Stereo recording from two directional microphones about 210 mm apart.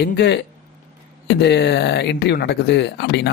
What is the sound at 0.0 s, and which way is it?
Speech, 55° left (ahead or behind).